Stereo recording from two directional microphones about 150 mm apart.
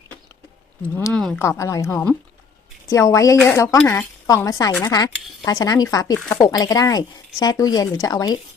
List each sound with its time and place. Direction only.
0.8 s speech: 10° left (ahead or behind)
1.4 s speech: 20° left (ahead or behind)